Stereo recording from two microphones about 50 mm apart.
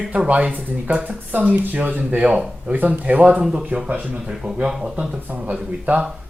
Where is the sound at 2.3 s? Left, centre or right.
Centre.